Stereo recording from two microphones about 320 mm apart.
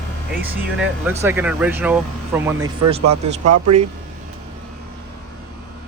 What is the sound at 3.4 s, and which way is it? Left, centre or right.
Speech, right.